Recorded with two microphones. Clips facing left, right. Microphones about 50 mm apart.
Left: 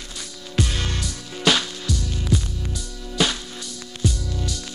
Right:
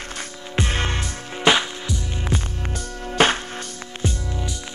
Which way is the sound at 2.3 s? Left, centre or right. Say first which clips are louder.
Left 2 dB; right.